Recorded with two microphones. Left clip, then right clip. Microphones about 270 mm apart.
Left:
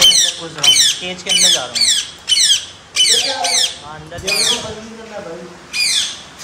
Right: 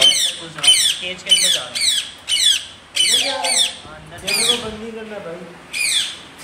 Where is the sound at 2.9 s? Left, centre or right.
Centre.